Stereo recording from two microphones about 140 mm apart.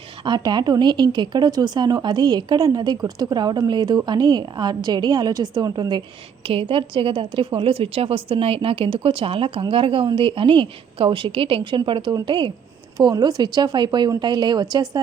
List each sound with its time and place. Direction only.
0.3 s a woman's voice: 30° right (ahead or behind)
6.4 s a woman's voice: 40° right (ahead or behind)